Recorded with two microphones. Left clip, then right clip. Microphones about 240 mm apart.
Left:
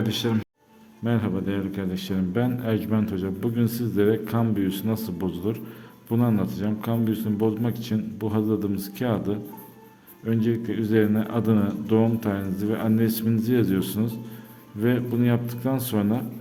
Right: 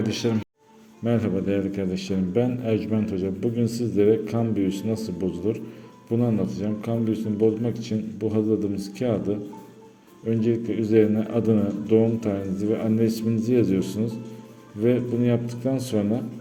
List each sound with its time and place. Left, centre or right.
0.0 s a man's voice: centre